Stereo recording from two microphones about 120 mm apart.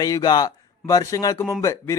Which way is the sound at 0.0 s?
30° left (ahead or behind).